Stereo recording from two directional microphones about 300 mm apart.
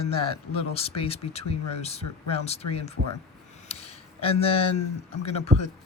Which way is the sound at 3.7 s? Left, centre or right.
Left.